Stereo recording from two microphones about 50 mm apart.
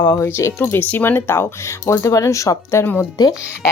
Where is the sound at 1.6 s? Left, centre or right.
Left.